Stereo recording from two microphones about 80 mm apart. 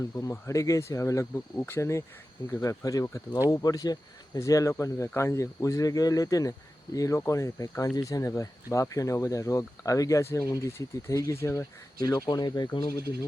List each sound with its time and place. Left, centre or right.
0.0 s speech: left
4.4 s speech: left
12.0 s speech: left